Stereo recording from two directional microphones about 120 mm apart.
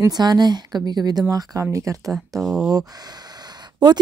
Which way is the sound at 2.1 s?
Centre (ahead or behind).